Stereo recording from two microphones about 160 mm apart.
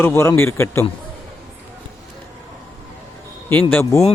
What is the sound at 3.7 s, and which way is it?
Speech, 15° left (ahead or behind).